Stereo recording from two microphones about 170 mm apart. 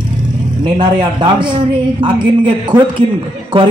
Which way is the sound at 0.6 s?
25° right (ahead or behind).